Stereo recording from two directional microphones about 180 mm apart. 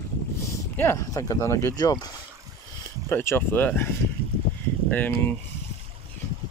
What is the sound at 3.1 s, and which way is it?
Speech, 15° left (ahead or behind).